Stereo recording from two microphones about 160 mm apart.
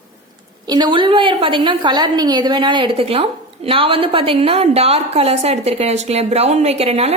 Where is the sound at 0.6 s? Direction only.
30° right (ahead or behind).